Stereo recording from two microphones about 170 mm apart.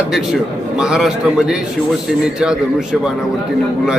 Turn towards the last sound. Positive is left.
turn(degrees=-5)  # may be behind; listen again after turning